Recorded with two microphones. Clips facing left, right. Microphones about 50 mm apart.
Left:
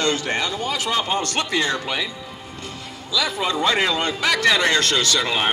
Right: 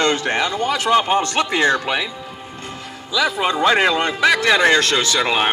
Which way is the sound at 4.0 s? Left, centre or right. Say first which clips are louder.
Right 4 dB; right.